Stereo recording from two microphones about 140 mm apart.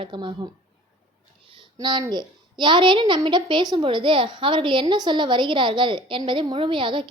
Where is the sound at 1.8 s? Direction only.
30° right (ahead or behind).